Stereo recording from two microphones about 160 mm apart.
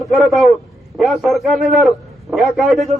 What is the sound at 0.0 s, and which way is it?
A man's voice, centre (ahead or behind).